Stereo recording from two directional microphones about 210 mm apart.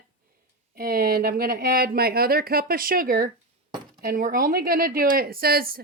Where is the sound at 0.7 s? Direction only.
45° right (ahead or behind).